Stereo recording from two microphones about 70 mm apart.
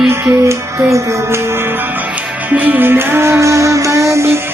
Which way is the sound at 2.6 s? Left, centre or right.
Right.